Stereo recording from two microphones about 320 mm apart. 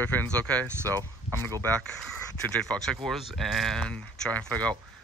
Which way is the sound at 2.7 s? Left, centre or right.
Centre.